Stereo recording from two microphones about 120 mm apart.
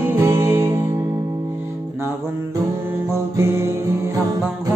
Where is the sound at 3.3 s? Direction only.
20° right (ahead or behind).